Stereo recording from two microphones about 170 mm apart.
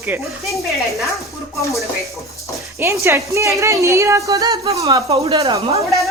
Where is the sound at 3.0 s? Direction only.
15° right (ahead or behind).